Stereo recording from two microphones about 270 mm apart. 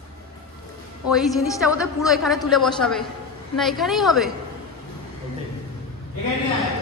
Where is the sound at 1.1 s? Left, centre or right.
Centre.